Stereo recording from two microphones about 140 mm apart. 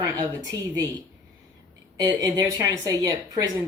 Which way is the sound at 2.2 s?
25° right (ahead or behind).